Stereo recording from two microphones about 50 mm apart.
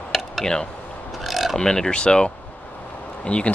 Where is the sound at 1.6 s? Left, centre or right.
Centre.